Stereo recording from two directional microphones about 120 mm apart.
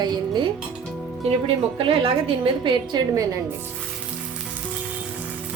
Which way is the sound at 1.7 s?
50° right (ahead or behind).